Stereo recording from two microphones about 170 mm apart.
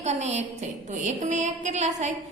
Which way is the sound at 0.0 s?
40° right (ahead or behind).